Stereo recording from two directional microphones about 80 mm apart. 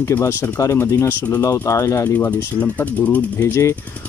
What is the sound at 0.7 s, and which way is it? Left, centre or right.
Speech, left.